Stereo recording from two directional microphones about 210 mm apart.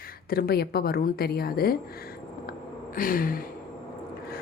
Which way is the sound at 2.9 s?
40° left (ahead or behind).